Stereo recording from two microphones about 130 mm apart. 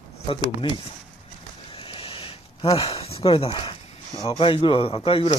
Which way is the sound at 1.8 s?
45° left (ahead or behind).